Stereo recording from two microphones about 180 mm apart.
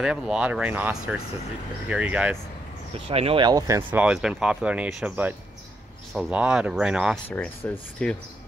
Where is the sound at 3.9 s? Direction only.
5° right (ahead or behind).